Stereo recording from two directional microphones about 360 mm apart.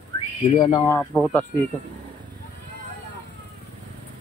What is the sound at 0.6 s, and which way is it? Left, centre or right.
Speech, centre.